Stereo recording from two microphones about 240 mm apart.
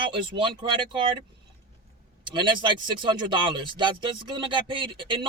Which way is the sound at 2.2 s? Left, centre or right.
Centre.